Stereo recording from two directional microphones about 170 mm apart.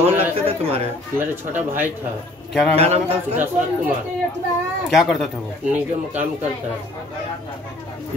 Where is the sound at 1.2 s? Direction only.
10° right (ahead or behind).